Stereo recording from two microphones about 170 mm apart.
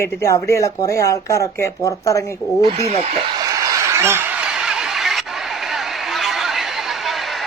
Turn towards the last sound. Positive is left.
turn(degrees=0)  # may be behind; listen again after turning